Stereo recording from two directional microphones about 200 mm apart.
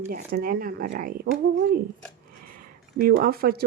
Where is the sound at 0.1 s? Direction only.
45° right (ahead or behind).